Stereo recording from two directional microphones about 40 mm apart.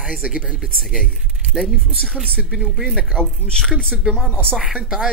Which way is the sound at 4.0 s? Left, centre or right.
Centre.